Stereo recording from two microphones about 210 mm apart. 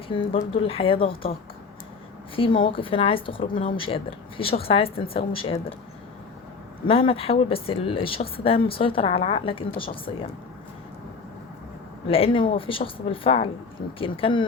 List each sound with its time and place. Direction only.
0.1 s a woman's voice: 25° left (ahead or behind)
2.3 s a woman's voice: 25° left (ahead or behind)
6.8 s a woman's voice: 25° left (ahead or behind)
12.0 s a woman's voice: 25° left (ahead or behind)